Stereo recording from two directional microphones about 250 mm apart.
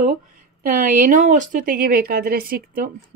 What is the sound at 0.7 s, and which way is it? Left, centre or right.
Speech, right.